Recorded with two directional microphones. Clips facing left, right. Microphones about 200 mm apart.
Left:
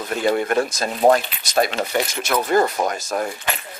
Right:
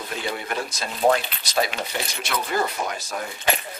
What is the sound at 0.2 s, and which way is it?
Speech, 50° left (ahead or behind).